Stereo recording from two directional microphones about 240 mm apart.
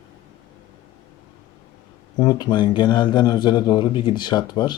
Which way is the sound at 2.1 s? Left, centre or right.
Centre.